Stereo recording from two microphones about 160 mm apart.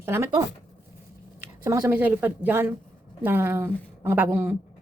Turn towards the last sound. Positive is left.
turn(degrees=-15)  # may be behind; listen again after turning